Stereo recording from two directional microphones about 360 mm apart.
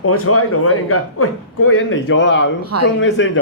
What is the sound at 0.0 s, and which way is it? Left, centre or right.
A man's voice, left.